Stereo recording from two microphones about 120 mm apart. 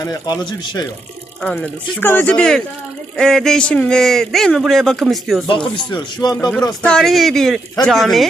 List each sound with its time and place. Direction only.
0.0 s speech: 35° left (ahead or behind)
1.4 s speech: 10° left (ahead or behind)
5.5 s speech: 45° left (ahead or behind)
6.8 s speech: 5° left (ahead or behind)